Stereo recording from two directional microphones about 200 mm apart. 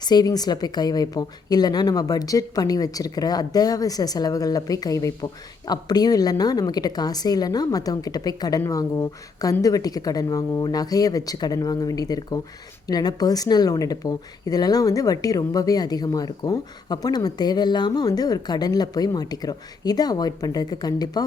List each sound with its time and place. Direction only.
0.0 s a woman's voice: 20° left (ahead or behind)